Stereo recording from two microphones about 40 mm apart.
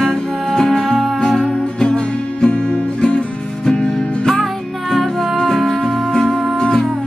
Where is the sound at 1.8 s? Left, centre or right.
Left.